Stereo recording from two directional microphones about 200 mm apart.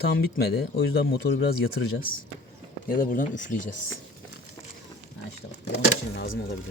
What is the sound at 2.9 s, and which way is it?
Speech, 40° left (ahead or behind).